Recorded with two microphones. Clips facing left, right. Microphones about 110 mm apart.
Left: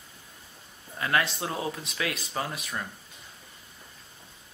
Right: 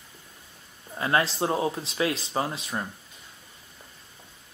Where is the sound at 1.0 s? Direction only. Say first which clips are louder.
Right 3 dB; 30° right (ahead or behind).